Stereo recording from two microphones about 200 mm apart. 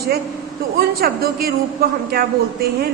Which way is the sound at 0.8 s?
50° right (ahead or behind).